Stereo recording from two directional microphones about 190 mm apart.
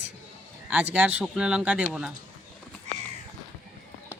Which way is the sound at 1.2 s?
5° right (ahead or behind).